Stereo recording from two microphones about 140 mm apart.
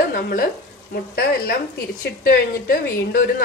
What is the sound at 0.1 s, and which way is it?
A woman's voice, 90° left.